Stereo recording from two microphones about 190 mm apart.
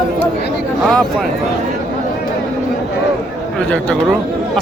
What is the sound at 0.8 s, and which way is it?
Speech, 5° left (ahead or behind).